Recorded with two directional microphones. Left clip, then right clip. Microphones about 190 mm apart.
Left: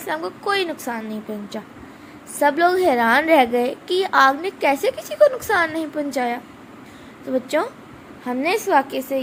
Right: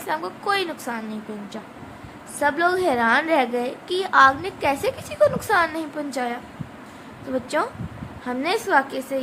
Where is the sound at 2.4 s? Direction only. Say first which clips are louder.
Left 4 dB; 20° left (ahead or behind).